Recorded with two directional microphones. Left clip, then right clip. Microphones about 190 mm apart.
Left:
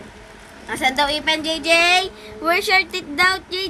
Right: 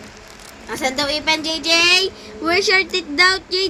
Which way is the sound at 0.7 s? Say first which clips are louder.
Left 2 dB; 20° left (ahead or behind).